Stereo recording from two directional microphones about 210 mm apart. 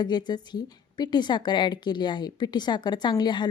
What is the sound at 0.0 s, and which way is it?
A woman's voice, 20° left (ahead or behind).